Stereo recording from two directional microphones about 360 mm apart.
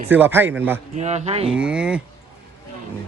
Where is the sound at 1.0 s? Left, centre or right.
Centre.